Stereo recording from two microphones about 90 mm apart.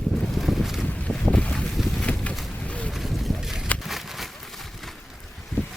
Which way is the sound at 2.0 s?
15° left (ahead or behind).